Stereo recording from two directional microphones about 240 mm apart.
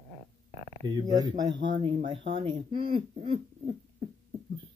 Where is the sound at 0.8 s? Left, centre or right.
Centre.